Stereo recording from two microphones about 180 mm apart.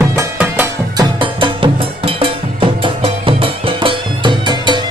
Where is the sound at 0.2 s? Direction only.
10° right (ahead or behind).